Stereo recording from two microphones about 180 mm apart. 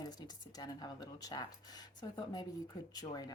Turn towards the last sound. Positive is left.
turn(degrees=20)  # may be behind; listen again after turning